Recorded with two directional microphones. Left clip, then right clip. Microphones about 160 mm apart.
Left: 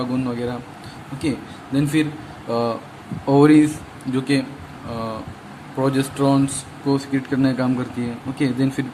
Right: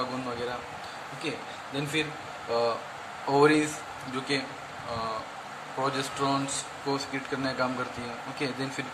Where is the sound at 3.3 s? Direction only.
30° left (ahead or behind).